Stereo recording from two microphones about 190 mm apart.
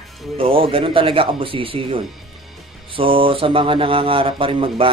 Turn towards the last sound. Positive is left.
turn(degrees=-25)  # may be behind; listen again after turning